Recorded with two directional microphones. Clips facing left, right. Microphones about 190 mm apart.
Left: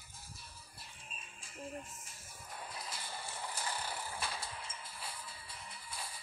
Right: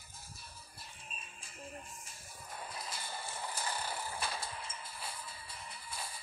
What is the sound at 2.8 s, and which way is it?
Mechanisms, 45° right (ahead or behind).